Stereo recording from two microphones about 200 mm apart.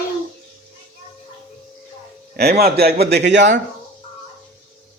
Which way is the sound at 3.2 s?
60° right (ahead or behind).